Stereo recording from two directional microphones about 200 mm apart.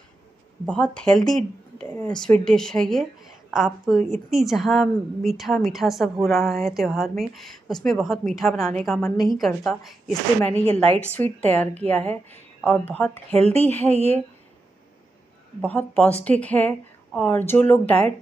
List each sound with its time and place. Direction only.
0.7 s a woman's voice: 5° left (ahead or behind)
13.8 s speech: 30° left (ahead or behind)
15.6 s a woman's voice: 5° left (ahead or behind)